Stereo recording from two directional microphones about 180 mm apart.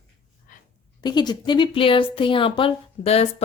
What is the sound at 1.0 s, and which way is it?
Speech, 25° left (ahead or behind).